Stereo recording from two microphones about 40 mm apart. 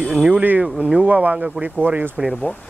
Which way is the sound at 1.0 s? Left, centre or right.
Right.